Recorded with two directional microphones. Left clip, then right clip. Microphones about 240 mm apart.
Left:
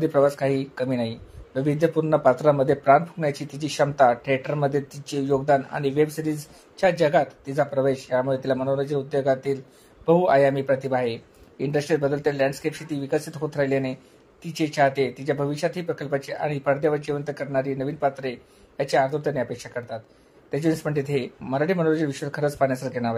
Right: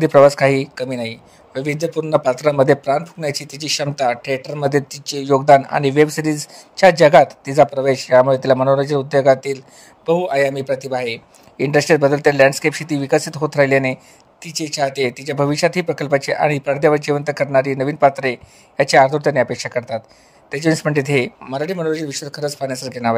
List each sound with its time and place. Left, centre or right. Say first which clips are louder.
0.0 s speech: right 10 dB; right